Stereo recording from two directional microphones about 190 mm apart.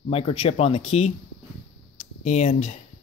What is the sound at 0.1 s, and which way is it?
Speech, 30° left (ahead or behind).